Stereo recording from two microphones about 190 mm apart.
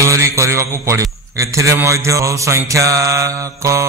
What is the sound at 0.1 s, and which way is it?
A man's voice, 15° right (ahead or behind).